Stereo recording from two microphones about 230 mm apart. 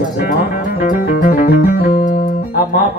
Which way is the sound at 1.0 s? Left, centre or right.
Left.